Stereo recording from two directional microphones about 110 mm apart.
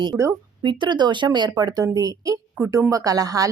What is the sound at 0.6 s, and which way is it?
Speech, 45° right (ahead or behind).